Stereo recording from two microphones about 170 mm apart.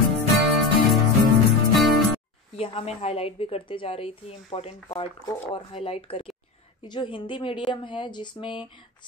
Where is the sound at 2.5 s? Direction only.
35° left (ahead or behind).